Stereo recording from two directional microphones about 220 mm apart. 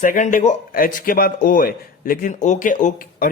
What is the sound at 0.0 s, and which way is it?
A man's voice, 35° left (ahead or behind).